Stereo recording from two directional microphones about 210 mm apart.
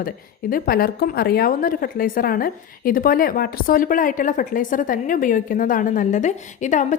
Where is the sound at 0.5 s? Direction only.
45° left (ahead or behind).